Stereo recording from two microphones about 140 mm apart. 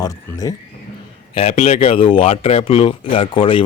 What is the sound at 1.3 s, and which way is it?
Speech, 45° left (ahead or behind).